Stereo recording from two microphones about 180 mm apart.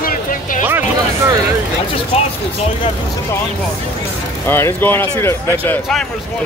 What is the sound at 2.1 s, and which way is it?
Speech, 35° left (ahead or behind).